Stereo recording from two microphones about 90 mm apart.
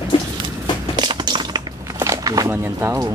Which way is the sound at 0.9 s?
60° right (ahead or behind).